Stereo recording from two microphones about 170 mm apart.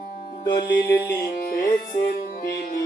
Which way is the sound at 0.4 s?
25° left (ahead or behind).